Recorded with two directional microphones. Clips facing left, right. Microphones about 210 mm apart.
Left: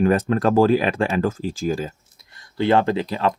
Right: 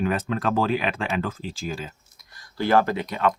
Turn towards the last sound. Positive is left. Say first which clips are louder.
# left 3 dB
turn(degrees=30)  # may be behind; listen again after turning